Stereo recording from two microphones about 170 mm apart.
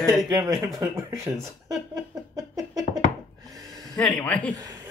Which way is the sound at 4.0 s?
5° left (ahead or behind).